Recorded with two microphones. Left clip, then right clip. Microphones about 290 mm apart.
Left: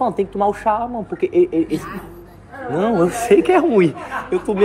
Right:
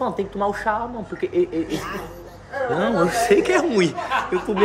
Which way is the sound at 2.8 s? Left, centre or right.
Centre.